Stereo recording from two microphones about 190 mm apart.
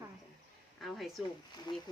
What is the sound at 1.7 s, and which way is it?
Speech, 25° left (ahead or behind).